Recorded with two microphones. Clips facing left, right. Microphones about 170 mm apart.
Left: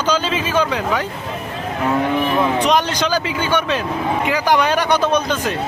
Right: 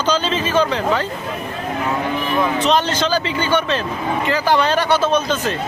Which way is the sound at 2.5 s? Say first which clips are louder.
Even; 10° left (ahead or behind).